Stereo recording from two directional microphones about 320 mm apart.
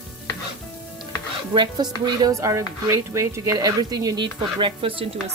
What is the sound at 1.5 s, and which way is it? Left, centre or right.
Speech, centre.